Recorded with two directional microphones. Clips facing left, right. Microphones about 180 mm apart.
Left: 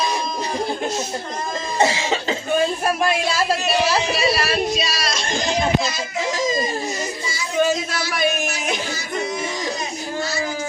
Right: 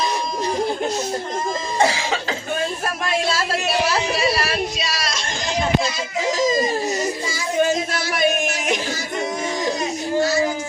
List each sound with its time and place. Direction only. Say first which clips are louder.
1.8 s cough: left 1 dB; 25° left (ahead or behind)